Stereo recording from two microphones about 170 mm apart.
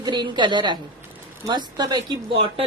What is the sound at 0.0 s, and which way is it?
A woman's voice, 25° right (ahead or behind).